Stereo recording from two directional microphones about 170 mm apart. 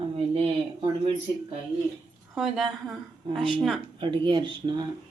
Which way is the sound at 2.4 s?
Centre (ahead or behind).